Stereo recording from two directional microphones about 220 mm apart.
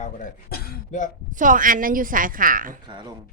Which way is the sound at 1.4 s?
40° right (ahead or behind).